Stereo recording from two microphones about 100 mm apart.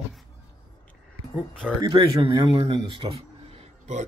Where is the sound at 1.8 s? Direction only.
55° right (ahead or behind).